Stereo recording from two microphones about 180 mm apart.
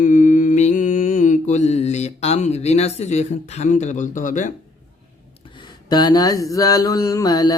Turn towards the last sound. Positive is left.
turn(degrees=20)  # may be behind; listen again after turning